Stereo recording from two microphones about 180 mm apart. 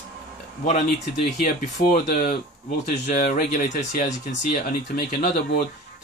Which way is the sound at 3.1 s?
45° left (ahead or behind).